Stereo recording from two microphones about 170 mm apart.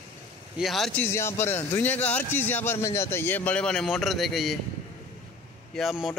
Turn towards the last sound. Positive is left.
turn(degrees=0)  # may be behind; listen again after turning